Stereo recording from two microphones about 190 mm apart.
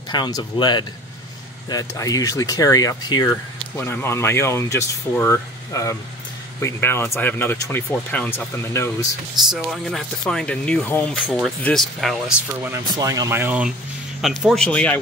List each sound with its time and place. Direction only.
0.1 s speech: 25° left (ahead or behind)
9.5 s speech: centre (ahead or behind)
12.7 s speech: 20° right (ahead or behind); by 15.0 s 5° left (ahead or behind)